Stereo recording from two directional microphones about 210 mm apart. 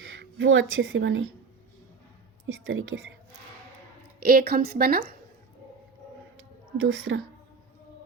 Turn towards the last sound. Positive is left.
turn(degrees=-70)  # may be behind; listen again after turning